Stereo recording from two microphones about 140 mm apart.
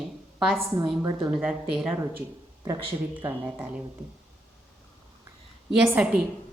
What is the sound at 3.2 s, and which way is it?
Speech, 15° right (ahead or behind).